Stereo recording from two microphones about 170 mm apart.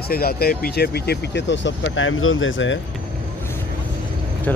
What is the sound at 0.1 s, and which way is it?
Speech, 65° left (ahead or behind).